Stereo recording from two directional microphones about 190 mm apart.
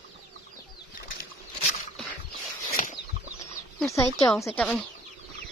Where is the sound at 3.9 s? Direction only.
15° left (ahead or behind).